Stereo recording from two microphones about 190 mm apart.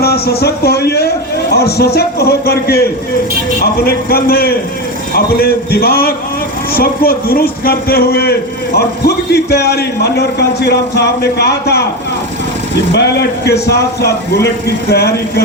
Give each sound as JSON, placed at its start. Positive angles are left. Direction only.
{"t": 0.0, "sound": "a man's voice", "side_deg": 55}
{"t": 12.9, "sound": "a man's voice", "side_deg": 60}